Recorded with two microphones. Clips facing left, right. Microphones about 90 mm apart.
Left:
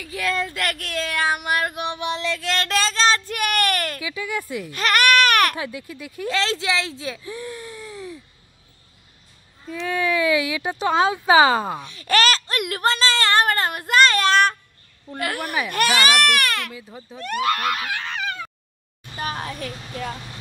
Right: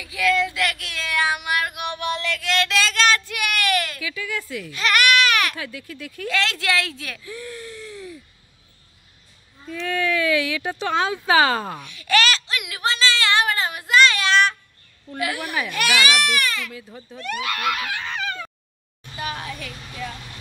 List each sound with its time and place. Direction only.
0.0 s speech: 40° left (ahead or behind)
2.4 s child singing: 40° left (ahead or behind)
4.0 s speech: 20° left (ahead or behind)
4.6 s baby cry: 40° left (ahead or behind)
5.6 s speech: 20° left (ahead or behind)
6.2 s speech: 30° left (ahead or behind); by 8.2 s centre (ahead or behind)
9.7 s speech: 10° left (ahead or behind)
11.8 s a sound: 35° left (ahead or behind)
15.1 s speech: 50° left (ahead or behind)
16.3 s speech: 60° left (ahead or behind)
16.7 s speech: 5° left (ahead or behind)
17.2 s speech: 40° left (ahead or behind)
19.1 s a sound: 40° left (ahead or behind)